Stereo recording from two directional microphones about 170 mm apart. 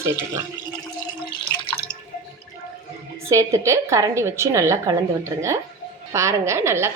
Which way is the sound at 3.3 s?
15° right (ahead or behind).